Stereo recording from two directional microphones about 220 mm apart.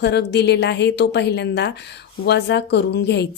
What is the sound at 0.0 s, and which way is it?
A woman's voice, 50° left (ahead or behind).